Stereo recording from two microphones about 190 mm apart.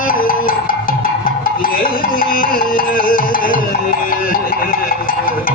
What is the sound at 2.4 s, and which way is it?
Music, 50° left (ahead or behind).